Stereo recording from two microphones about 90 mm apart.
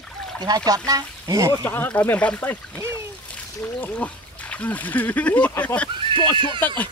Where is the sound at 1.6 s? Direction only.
20° left (ahead or behind).